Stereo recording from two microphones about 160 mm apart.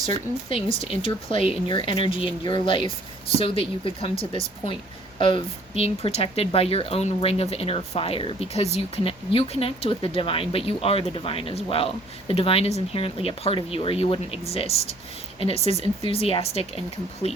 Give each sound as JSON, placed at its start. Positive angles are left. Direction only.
{"t": 0.0, "sound": "a woman's voice", "side_deg": 35}